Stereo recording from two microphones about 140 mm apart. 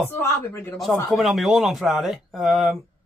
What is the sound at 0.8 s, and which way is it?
Speech, centre (ahead or behind).